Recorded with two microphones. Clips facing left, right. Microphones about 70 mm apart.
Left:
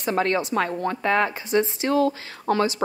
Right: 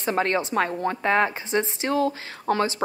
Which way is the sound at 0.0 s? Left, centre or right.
Right.